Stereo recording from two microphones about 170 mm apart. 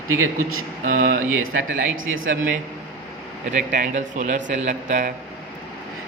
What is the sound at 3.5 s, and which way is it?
A man's voice, 50° right (ahead or behind).